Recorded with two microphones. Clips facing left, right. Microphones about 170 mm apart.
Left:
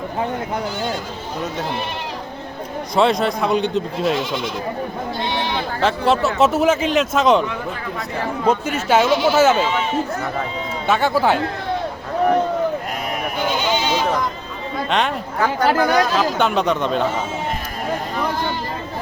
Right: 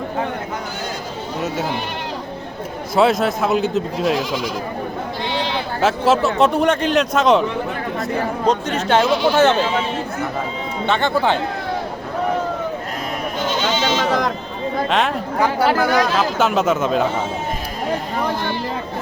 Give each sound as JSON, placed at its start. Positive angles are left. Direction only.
{"t": 2.9, "sound": "speech", "side_deg": -5}
{"t": 5.8, "sound": "speech", "side_deg": 0}
{"t": 8.4, "sound": "speech", "side_deg": 5}
{"t": 10.8, "sound": "speech", "side_deg": 5}
{"t": 14.0, "sound": "a sound", "side_deg": -90}
{"t": 14.8, "sound": "speech", "side_deg": 0}